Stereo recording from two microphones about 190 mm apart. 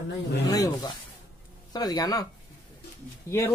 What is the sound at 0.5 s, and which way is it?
Speech, 20° left (ahead or behind).